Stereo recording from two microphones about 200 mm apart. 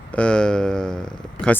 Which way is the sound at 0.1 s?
5° left (ahead or behind).